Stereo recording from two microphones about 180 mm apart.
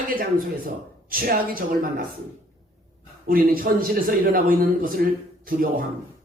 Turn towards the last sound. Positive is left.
turn(degrees=-50)  # may be behind; listen again after turning